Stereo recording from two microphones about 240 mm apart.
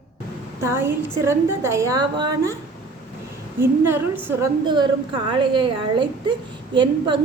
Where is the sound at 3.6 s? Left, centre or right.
Centre.